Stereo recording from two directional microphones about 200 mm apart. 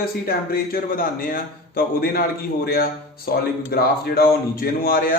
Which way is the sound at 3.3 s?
50° left (ahead or behind).